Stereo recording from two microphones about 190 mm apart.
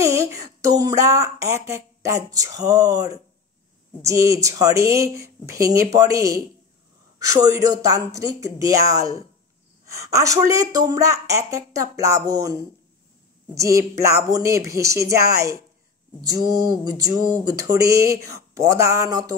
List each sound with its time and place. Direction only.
0.0 s speech: 15° right (ahead or behind)
7.3 s speech: 20° right (ahead or behind)
13.6 s speech: 15° right (ahead or behind)